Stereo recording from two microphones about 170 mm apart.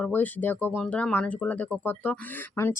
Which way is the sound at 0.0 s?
10° left (ahead or behind).